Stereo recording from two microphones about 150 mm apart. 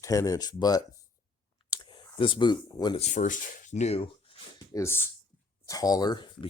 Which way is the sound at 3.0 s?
55° left (ahead or behind).